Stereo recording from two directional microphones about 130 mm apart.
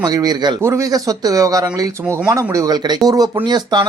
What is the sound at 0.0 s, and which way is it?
Speech, 30° right (ahead or behind).